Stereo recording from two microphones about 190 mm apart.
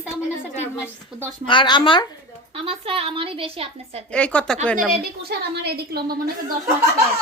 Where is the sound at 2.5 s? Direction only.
30° right (ahead or behind).